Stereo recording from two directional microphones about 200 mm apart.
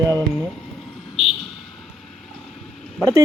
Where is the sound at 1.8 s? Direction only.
Centre (ahead or behind).